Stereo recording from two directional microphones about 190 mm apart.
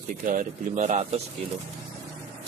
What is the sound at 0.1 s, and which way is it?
Speech, 45° right (ahead or behind).